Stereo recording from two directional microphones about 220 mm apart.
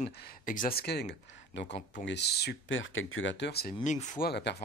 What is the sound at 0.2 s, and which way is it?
Speech, 40° left (ahead or behind).